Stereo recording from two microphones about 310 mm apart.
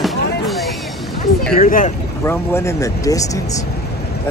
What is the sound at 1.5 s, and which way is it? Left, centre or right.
Speech, left.